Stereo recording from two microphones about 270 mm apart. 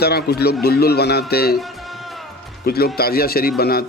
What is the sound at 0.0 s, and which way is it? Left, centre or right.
Speech, left.